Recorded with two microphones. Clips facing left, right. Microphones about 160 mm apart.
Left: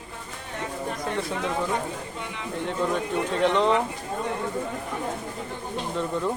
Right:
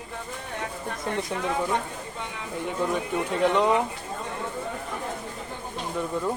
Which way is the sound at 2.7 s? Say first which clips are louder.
Left 1 dB; 10° right (ahead or behind).